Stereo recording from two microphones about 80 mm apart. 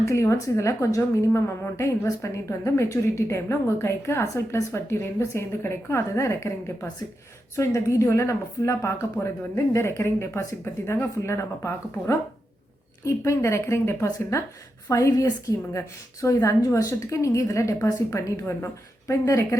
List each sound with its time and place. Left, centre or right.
0.0 s a woman's voice: left